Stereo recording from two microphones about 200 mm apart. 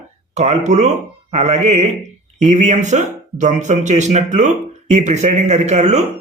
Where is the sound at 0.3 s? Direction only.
35° right (ahead or behind).